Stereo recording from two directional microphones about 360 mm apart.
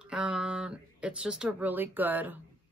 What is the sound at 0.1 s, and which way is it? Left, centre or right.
Speech, centre.